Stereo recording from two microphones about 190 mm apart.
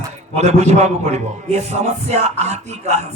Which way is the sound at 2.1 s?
35° right (ahead or behind).